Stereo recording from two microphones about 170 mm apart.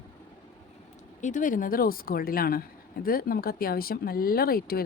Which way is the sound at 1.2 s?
50° left (ahead or behind).